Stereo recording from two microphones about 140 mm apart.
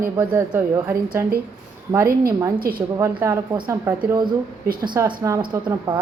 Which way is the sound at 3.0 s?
20° right (ahead or behind).